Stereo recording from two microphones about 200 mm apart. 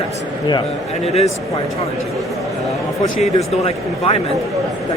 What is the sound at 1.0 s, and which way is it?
Speech, 30° left (ahead or behind).